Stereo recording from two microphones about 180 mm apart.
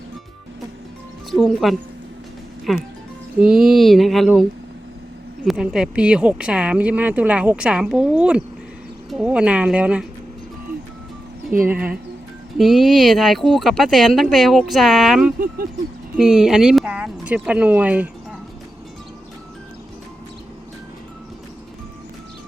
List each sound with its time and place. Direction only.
1.3 s speech: centre (ahead or behind)
5.5 s speech: 5° right (ahead or behind)
11.7 s speech: 10° right (ahead or behind)
15.4 s speech: 55° right (ahead or behind)
16.1 s speech: 5° right (ahead or behind)